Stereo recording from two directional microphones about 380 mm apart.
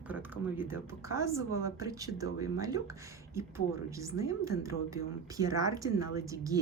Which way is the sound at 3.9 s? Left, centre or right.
Centre.